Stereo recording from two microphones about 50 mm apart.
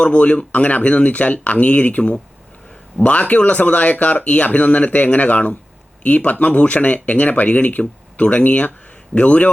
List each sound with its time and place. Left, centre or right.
0.0 s speech: left